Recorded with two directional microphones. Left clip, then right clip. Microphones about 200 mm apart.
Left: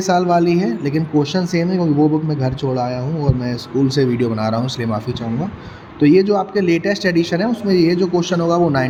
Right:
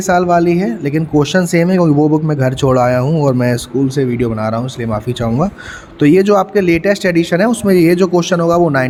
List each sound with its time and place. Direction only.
0.1 s speech: 25° right (ahead or behind)
3.8 s speech: 20° right (ahead or behind)
6.0 s speech: 35° right (ahead or behind)